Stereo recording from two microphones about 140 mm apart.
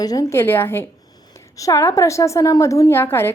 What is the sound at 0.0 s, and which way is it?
A woman's voice, 25° left (ahead or behind).